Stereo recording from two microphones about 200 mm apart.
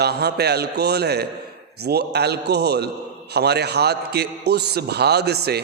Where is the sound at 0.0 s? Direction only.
55° right (ahead or behind).